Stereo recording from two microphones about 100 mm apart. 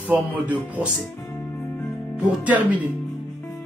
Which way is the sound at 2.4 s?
15° right (ahead or behind).